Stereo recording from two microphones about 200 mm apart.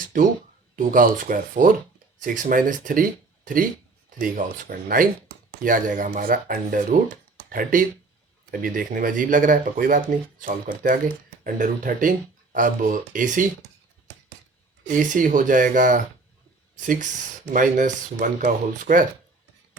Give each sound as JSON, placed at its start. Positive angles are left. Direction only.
{"t": 0.0, "sound": "a sound", "side_deg": -45}
{"t": 0.8, "sound": "speech", "side_deg": -45}
{"t": 14.8, "sound": "speech", "side_deg": -40}